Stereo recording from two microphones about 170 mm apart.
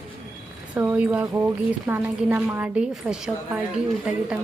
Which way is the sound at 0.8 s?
10° right (ahead or behind).